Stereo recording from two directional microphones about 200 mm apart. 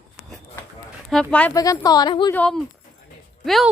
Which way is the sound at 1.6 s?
20° left (ahead or behind).